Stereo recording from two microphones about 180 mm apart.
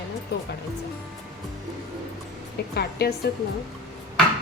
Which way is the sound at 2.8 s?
60° left (ahead or behind).